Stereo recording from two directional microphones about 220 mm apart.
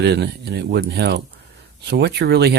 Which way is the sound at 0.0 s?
50° right (ahead or behind).